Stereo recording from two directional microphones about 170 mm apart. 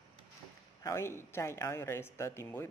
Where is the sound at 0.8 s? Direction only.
15° left (ahead or behind).